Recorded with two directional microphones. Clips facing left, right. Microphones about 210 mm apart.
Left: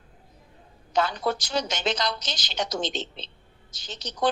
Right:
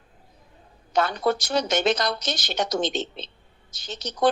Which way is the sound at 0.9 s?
60° right (ahead or behind).